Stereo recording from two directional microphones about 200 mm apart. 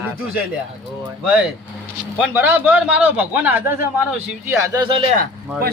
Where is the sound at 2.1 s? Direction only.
10° right (ahead or behind).